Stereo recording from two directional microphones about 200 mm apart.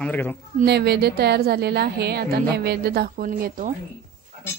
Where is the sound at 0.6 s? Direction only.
55° right (ahead or behind).